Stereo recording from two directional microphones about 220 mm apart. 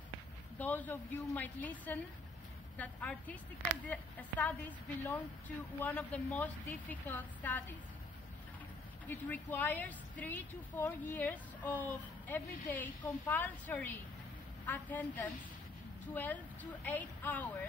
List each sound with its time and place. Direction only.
0.6 s a woman's voice: 5° left (ahead or behind)
9.0 s a woman's voice: 10° left (ahead or behind)